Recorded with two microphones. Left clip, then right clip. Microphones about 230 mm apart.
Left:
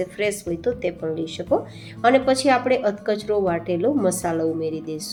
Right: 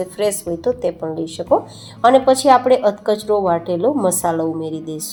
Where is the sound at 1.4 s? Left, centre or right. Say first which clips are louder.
Right 7 dB; right.